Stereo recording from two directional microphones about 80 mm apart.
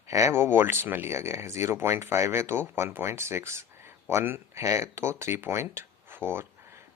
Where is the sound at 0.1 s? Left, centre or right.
Right.